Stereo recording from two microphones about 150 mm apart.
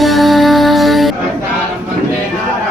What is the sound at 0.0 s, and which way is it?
Music, centre (ahead or behind).